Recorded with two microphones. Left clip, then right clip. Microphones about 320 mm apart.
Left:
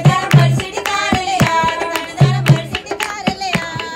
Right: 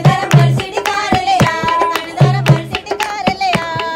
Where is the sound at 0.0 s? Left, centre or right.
Right.